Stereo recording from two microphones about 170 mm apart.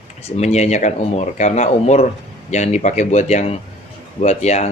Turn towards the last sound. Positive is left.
turn(degrees=40)  # may be behind; listen again after turning